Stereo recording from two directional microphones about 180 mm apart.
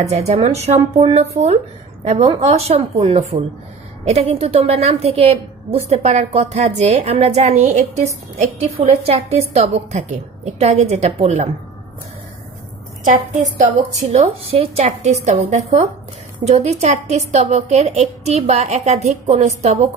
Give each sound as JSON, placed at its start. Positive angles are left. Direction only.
{"t": 0.0, "sound": "a woman's voice", "side_deg": -40}
{"t": 13.0, "sound": "a woman's voice", "side_deg": -45}